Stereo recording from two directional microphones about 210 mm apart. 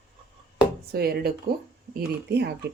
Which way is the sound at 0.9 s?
50° right (ahead or behind).